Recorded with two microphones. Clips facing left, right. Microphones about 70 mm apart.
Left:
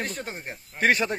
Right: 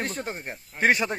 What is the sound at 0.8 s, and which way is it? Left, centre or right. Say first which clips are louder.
Speech: even; centre.